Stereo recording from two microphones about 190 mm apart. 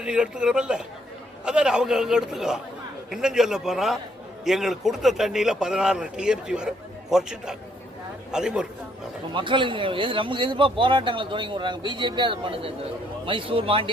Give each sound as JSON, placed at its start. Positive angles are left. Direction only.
{"t": 0.0, "sound": "a man's voice", "side_deg": -5}
{"t": 9.3, "sound": "a man's voice", "side_deg": -25}